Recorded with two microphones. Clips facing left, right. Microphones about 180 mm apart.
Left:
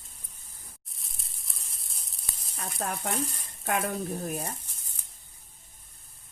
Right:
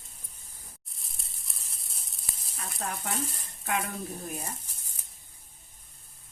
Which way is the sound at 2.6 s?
45° left (ahead or behind).